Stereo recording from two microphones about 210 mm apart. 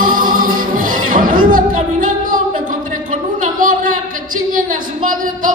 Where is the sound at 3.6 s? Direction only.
40° right (ahead or behind).